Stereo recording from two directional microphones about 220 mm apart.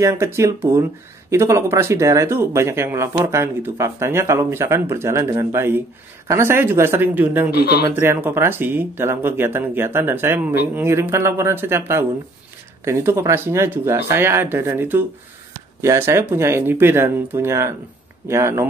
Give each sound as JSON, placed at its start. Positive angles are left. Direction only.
{"t": 0.0, "sound": "speech", "side_deg": -15}
{"t": 7.5, "sound": "speech", "side_deg": 50}
{"t": 7.9, "sound": "speech", "side_deg": -10}